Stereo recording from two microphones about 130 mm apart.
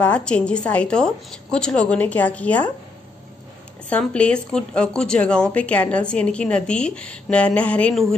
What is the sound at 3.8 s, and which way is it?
Speech, 10° left (ahead or behind).